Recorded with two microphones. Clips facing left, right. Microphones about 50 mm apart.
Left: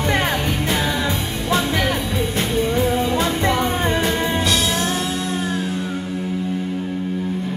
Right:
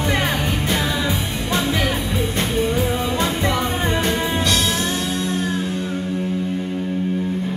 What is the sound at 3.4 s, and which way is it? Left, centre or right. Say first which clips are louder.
Music: left 2 dB; left.